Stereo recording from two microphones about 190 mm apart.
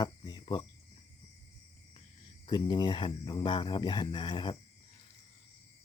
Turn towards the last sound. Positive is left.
turn(degrees=25)  # may be behind; listen again after turning